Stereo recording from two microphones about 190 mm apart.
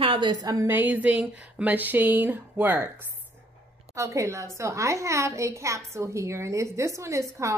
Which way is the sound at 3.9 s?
15° right (ahead or behind).